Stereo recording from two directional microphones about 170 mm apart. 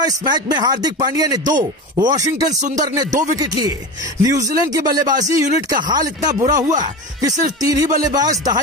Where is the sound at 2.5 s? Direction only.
45° right (ahead or behind).